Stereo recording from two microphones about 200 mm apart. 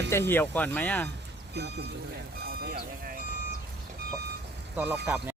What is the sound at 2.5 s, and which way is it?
Speech, 50° right (ahead or behind).